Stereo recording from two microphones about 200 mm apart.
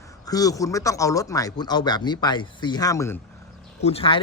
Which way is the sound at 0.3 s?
15° left (ahead or behind).